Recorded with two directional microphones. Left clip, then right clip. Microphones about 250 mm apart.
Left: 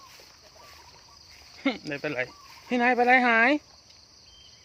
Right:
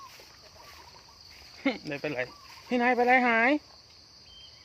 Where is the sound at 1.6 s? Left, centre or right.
Centre.